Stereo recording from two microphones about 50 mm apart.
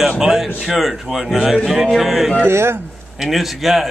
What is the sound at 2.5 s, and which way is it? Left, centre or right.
Speech, right.